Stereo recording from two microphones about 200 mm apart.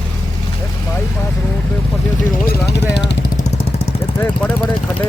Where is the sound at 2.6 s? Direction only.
60° left (ahead or behind).